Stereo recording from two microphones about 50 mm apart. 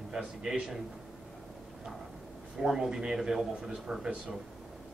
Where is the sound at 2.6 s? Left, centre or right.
Centre.